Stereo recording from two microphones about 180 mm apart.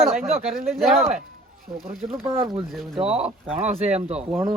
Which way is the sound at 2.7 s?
Centre (ahead or behind).